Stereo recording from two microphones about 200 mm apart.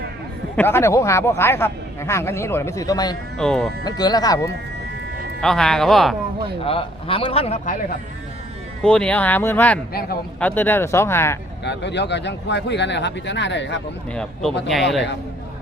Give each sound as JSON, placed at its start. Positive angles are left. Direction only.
{"t": 0.5, "sound": "speech", "side_deg": 10}
{"t": 3.3, "sound": "speech", "side_deg": 5}
{"t": 3.8, "sound": "a man's voice", "side_deg": 20}
{"t": 5.4, "sound": "speech", "side_deg": 0}
{"t": 6.7, "sound": "a man's voice", "side_deg": 25}
{"t": 8.8, "sound": "speech", "side_deg": 5}
{"t": 11.6, "sound": "speech", "side_deg": 60}
{"t": 14.1, "sound": "speech", "side_deg": 5}